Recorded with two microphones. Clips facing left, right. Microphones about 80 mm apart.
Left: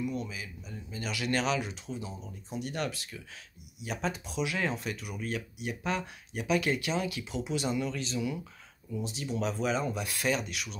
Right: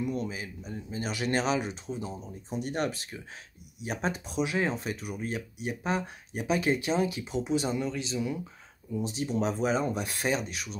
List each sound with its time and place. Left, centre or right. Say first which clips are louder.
0.0 s speech: right 3 dB; right
9.0 s speech: right 4 dB; right